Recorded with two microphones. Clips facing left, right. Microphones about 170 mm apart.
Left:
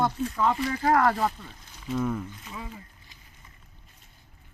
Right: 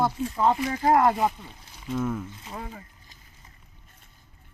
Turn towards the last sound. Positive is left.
turn(degrees=-50)  # may be behind; listen again after turning